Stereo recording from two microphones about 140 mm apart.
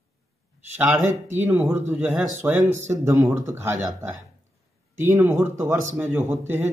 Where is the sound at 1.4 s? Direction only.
15° right (ahead or behind).